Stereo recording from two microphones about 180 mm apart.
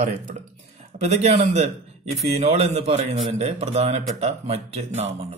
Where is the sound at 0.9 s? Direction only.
40° right (ahead or behind).